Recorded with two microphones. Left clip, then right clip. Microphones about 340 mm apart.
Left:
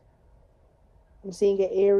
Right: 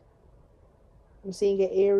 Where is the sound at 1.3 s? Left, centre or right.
Left.